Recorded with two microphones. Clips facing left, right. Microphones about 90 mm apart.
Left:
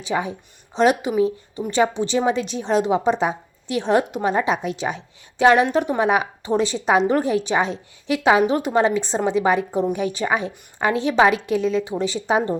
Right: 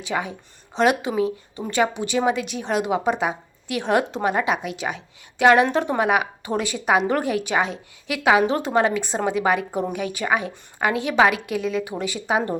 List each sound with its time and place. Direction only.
0.0 s a woman's voice: 20° left (ahead or behind)
5.6 s a woman's voice: 15° left (ahead or behind)
6.1 s a woman's voice: 30° left (ahead or behind)
8.4 s a woman's voice: 20° left (ahead or behind)